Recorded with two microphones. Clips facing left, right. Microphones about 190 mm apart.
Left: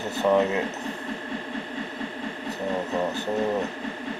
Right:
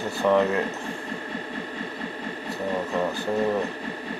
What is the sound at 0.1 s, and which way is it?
Speech, 20° left (ahead or behind).